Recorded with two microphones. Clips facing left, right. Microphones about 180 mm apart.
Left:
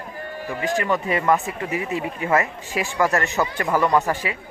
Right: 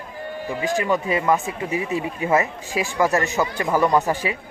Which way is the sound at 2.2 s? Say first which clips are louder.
Right 1 dB; 20° right (ahead or behind).